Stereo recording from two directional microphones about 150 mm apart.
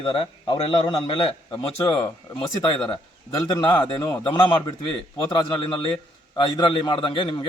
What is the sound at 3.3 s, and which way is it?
Speech, 25° left (ahead or behind).